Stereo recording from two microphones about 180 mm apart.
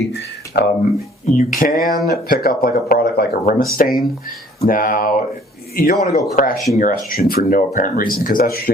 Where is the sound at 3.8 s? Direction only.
45° left (ahead or behind).